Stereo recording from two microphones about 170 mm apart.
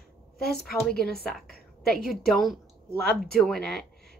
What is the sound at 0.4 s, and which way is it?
Speech, 70° left (ahead or behind).